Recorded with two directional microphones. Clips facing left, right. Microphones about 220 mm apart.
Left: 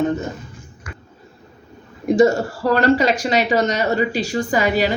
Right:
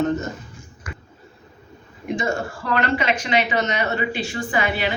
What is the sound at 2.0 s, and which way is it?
Speech, 40° left (ahead or behind).